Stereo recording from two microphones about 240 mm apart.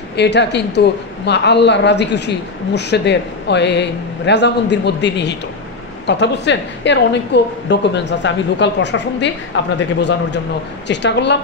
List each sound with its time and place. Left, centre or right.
0.1 s a woman's voice: left